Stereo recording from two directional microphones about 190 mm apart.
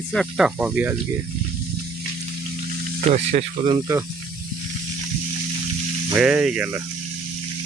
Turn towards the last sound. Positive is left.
turn(degrees=-5)  # may be behind; listen again after turning